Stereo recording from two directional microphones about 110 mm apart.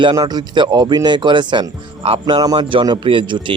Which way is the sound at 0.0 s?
50° right (ahead or behind).